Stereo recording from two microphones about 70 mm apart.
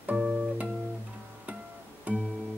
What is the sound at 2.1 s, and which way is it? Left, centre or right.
Music, centre.